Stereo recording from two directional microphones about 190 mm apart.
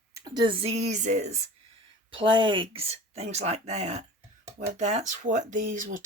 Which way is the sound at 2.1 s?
25° right (ahead or behind).